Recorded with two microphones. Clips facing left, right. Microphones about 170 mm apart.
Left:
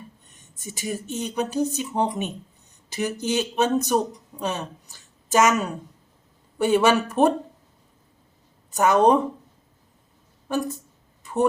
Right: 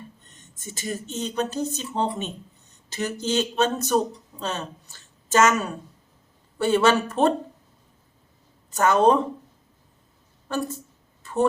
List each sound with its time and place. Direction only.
0.6 s speech: 15° left (ahead or behind)
8.7 s speech: 15° left (ahead or behind)